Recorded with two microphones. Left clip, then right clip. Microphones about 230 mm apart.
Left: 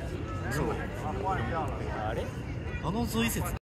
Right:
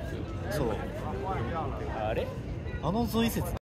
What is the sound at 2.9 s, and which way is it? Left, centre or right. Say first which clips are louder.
Speech: right 2 dB; right.